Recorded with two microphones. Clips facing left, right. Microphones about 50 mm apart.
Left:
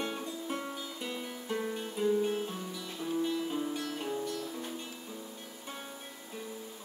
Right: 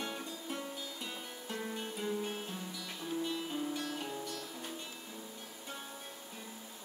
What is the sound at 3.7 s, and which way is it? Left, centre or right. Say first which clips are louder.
Music: left 3 dB; centre.